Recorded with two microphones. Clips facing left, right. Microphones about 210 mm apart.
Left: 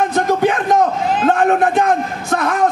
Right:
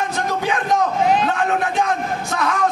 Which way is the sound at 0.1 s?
55° left (ahead or behind).